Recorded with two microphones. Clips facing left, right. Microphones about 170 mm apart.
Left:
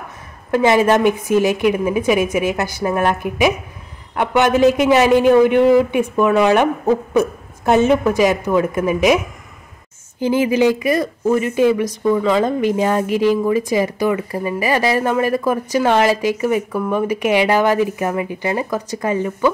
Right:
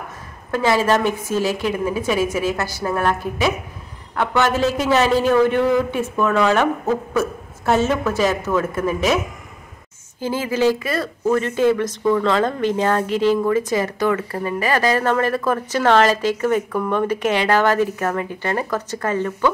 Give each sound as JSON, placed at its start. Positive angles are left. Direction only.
{"t": 0.5, "sound": "speech", "side_deg": 15}
{"t": 10.2, "sound": "speech", "side_deg": 15}